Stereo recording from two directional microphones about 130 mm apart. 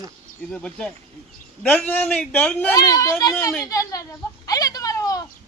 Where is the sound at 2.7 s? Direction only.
25° left (ahead or behind).